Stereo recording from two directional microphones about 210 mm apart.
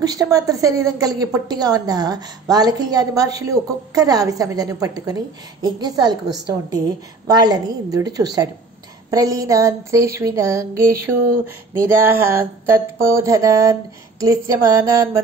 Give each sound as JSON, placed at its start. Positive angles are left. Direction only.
{"t": 0.0, "sound": "a woman's voice", "side_deg": -15}
{"t": 7.2, "sound": "a woman's voice", "side_deg": -20}